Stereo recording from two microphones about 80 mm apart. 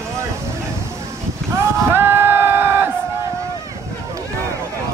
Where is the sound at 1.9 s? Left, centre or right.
Right.